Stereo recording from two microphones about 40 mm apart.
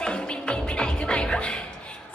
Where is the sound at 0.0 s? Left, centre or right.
Left.